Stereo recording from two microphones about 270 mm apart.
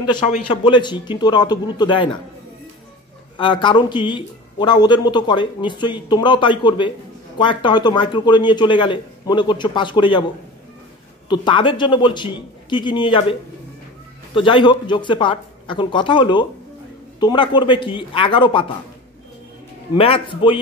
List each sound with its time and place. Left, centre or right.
0.5 s speech: centre
3.3 s speech: centre
11.2 s speech: centre
20.0 s a man's voice: centre